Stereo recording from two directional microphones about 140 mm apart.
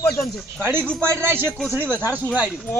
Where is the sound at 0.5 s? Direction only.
15° right (ahead or behind).